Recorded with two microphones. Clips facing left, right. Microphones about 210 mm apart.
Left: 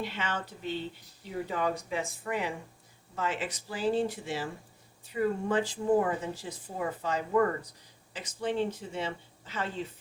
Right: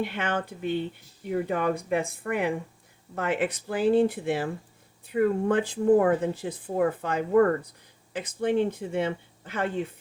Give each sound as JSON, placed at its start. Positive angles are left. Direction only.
{"t": 0.0, "sound": "speech", "side_deg": -55}